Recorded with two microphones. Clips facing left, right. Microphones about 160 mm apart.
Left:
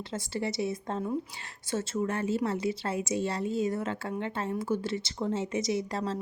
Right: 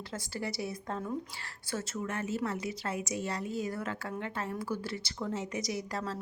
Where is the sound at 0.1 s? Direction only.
25° left (ahead or behind).